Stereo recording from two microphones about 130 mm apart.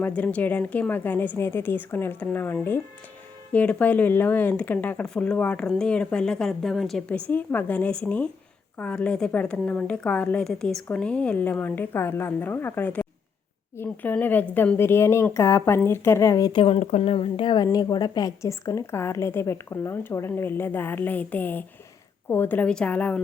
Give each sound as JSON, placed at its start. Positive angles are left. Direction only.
{"t": 0.0, "sound": "speech", "side_deg": 10}
{"t": 7.1, "sound": "a woman's voice", "side_deg": 15}
{"t": 16.5, "sound": "a woman's voice", "side_deg": 45}